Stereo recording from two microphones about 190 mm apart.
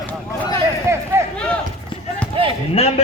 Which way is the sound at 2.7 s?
30° left (ahead or behind).